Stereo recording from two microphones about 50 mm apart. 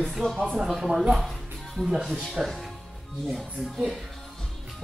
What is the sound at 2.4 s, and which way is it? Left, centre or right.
Music, centre.